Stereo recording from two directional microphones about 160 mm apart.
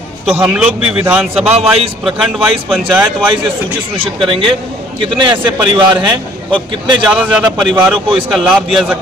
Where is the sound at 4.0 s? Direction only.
35° right (ahead or behind).